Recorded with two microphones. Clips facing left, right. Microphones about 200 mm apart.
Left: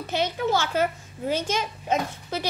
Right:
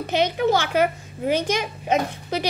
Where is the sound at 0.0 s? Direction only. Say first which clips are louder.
Right 5 dB; 20° right (ahead or behind).